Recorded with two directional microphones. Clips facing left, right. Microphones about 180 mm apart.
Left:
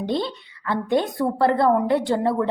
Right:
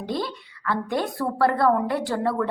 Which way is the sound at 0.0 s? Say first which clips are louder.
Left 4 dB; 25° left (ahead or behind).